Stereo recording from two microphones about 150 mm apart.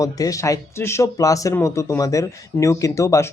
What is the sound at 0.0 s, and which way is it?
Speech, 20° left (ahead or behind).